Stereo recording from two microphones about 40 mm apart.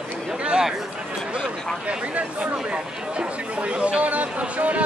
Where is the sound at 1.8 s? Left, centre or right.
Right.